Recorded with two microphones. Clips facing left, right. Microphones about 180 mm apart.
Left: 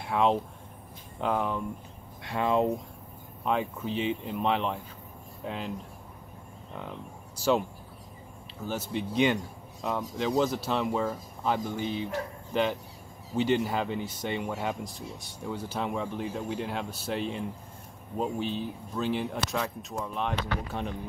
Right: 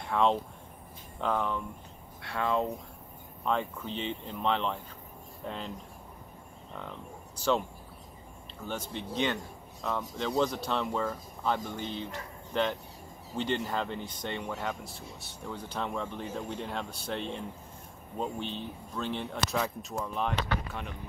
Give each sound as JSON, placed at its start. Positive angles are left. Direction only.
{"t": 0.0, "sound": "speech", "side_deg": 10}
{"t": 6.7, "sound": "speech", "side_deg": 10}
{"t": 8.6, "sound": "speech", "side_deg": 5}
{"t": 13.4, "sound": "speech", "side_deg": 10}